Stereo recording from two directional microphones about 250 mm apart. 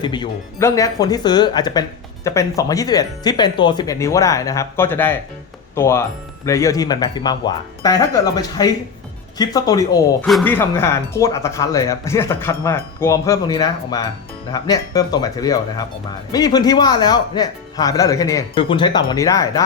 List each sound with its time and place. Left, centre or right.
0.0 s speech: centre